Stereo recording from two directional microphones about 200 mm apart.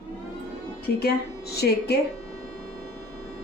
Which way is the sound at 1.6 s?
55° left (ahead or behind).